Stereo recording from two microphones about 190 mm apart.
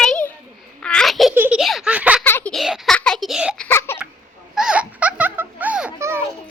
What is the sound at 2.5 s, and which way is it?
A child's voice, centre (ahead or behind).